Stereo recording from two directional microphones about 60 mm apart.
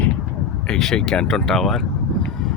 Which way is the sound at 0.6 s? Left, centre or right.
Centre.